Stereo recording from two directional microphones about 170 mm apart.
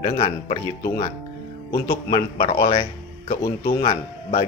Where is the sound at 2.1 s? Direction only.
30° left (ahead or behind).